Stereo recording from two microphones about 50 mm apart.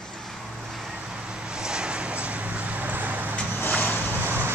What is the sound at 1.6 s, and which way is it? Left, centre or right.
Vehicle, centre.